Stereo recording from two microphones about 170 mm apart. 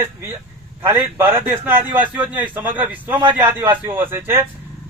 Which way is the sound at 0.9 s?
15° right (ahead or behind).